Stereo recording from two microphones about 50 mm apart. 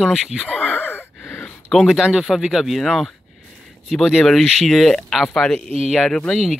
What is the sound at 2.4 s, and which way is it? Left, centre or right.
Speech, centre.